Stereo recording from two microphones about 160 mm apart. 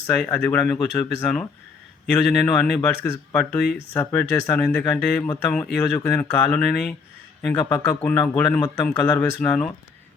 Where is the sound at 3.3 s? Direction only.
10° left (ahead or behind).